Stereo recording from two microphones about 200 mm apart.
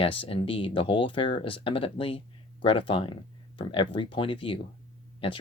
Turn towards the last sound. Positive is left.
turn(degrees=25)  # may be behind; listen again after turning